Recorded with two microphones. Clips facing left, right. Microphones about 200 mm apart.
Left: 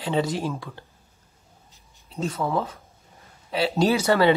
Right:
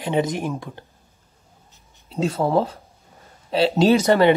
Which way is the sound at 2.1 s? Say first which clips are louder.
Right 6 dB; 30° right (ahead or behind).